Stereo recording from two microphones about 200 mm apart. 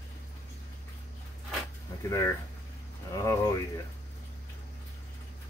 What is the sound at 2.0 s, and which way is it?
Speech, 15° left (ahead or behind).